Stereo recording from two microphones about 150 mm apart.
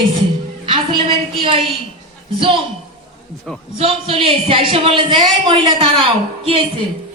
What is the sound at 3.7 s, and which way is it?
Speech, 40° right (ahead or behind).